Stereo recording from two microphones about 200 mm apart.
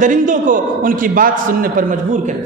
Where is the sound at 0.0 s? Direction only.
40° right (ahead or behind).